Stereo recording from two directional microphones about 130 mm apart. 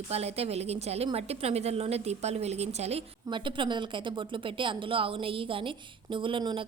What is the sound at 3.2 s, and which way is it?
A woman's voice, 40° right (ahead or behind).